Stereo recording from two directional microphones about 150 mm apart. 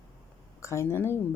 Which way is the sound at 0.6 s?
20° left (ahead or behind).